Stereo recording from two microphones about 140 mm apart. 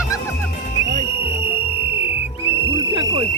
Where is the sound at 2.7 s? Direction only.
35° right (ahead or behind).